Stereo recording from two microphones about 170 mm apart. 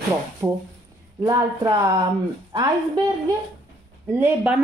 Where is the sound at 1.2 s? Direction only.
20° right (ahead or behind).